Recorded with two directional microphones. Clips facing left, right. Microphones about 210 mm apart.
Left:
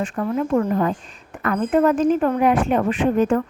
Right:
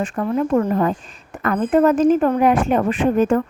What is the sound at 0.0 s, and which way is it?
Speech, 40° right (ahead or behind).